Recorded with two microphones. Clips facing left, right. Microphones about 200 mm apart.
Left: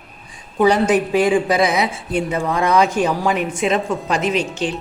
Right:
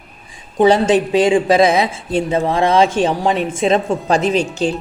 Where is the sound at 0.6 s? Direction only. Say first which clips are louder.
Right 3 dB; 25° right (ahead or behind).